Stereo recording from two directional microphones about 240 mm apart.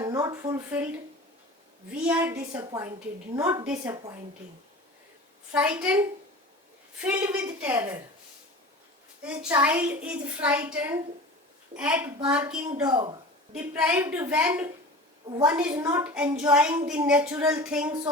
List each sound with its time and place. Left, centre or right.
0.0 s speech: centre
1.9 s a woman's voice: centre
5.5 s a woman's voice: centre
9.2 s a woman's voice: centre
12.8 s a woman's voice: centre
13.5 s a woman's voice: centre